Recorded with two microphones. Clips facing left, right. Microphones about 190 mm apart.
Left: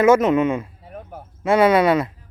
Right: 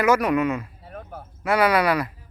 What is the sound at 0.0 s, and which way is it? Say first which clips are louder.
Speech: left 5 dB; 25° left (ahead or behind).